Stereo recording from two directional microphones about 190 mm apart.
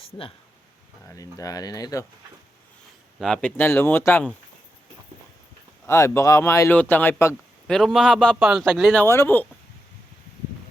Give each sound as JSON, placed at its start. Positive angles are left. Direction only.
{"t": 0.0, "sound": "speech", "side_deg": 30}
{"t": 1.1, "sound": "speech", "side_deg": 20}
{"t": 3.2, "sound": "speech", "side_deg": 0}
{"t": 5.8, "sound": "speech", "side_deg": 15}
{"t": 7.7, "sound": "a man's voice", "side_deg": 0}